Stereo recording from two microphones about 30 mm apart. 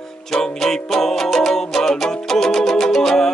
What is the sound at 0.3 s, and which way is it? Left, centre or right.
Music, centre.